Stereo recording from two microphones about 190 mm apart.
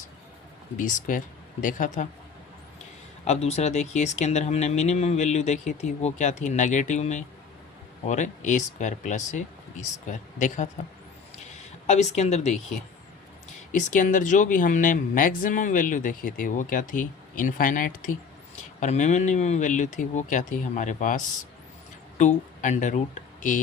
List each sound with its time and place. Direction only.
0.8 s speech: 40° left (ahead or behind)
3.2 s speech: 35° left (ahead or behind)
11.9 s speech: 35° left (ahead or behind)